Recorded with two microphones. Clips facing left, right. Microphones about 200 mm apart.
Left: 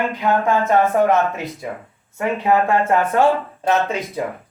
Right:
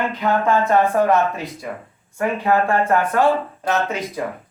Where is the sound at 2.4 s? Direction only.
15° left (ahead or behind).